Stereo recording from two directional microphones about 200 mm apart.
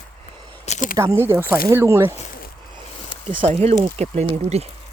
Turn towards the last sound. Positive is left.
turn(degrees=-35)  # may be behind; listen again after turning